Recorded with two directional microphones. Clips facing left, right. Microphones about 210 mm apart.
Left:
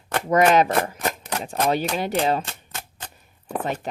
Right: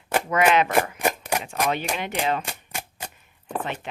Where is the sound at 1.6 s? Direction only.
35° left (ahead or behind).